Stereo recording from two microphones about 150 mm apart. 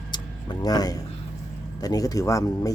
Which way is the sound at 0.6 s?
25° left (ahead or behind).